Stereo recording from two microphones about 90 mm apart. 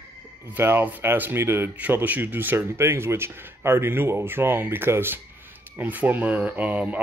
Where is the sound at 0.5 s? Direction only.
25° right (ahead or behind).